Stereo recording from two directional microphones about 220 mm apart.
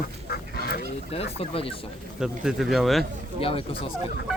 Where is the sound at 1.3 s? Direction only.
25° left (ahead or behind).